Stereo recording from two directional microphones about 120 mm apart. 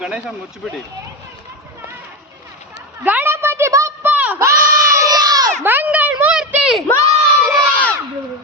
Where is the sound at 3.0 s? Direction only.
15° right (ahead or behind); by 5.5 s 30° right (ahead or behind).